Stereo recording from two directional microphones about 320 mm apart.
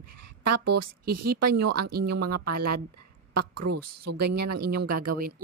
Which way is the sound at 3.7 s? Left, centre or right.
Right.